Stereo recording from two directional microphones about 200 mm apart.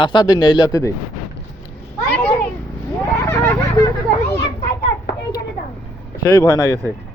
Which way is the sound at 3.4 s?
15° left (ahead or behind).